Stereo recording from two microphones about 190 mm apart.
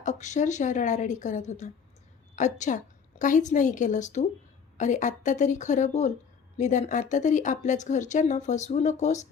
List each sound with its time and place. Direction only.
0.0 s speech: 40° left (ahead or behind)